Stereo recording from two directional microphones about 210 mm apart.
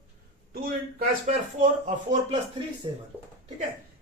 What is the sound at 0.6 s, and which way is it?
Speech, 45° right (ahead or behind).